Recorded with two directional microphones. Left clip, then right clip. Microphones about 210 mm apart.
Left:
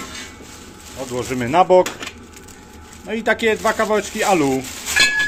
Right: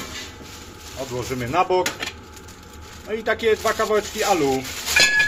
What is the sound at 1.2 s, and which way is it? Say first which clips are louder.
Speech: left 7 dB; 50° left (ahead or behind).